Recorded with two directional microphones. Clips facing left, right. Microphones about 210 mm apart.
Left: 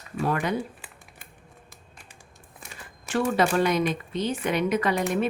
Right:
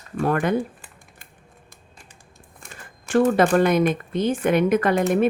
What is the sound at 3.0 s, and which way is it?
A woman's voice, 50° right (ahead or behind).